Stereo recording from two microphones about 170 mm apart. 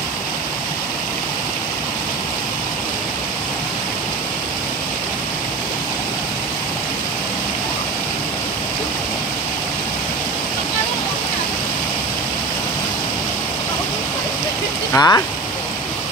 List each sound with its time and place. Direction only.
14.9 s speech: 20° left (ahead or behind)